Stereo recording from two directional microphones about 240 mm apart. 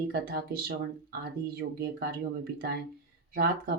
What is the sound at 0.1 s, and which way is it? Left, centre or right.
Speech, right.